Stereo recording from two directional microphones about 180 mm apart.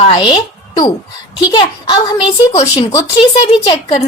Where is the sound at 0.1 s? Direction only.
30° left (ahead or behind).